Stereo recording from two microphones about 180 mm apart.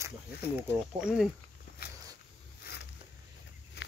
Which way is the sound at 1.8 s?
60° left (ahead or behind).